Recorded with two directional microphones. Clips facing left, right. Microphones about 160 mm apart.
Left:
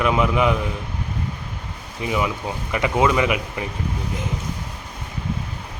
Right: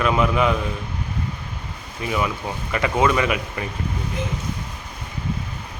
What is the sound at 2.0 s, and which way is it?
Speech, 20° left (ahead or behind).